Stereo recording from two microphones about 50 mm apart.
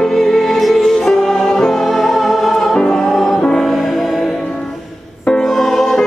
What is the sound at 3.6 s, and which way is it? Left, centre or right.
Music, centre.